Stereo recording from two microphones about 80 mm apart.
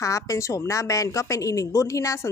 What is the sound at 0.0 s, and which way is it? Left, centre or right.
A woman's voice, left.